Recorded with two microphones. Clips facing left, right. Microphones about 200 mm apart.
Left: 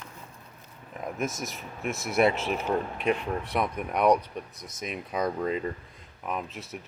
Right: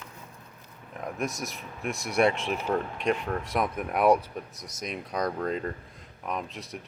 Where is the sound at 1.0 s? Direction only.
Centre (ahead or behind).